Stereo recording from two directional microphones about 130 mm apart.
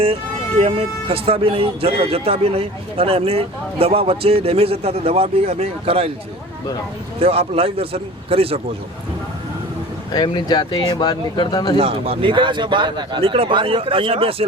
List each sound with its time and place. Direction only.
0.6 s speech: 45° right (ahead or behind)
7.2 s speech: 50° right (ahead or behind)
10.1 s speech: 35° left (ahead or behind)
11.8 s speech: 50° right (ahead or behind)